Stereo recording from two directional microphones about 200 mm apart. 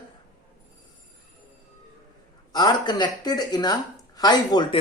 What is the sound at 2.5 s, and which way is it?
A woman's voice, 20° left (ahead or behind).